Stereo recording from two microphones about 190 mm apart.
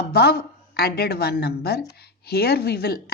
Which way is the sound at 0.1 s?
55° left (ahead or behind).